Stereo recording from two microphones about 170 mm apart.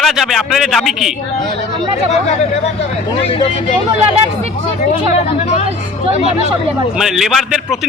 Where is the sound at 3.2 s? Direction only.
35° left (ahead or behind).